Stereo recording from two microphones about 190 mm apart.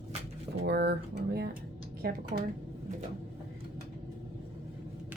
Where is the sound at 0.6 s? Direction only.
55° right (ahead or behind).